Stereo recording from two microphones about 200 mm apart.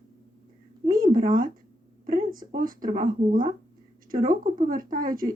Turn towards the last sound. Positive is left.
turn(degrees=-45)  # may be behind; listen again after turning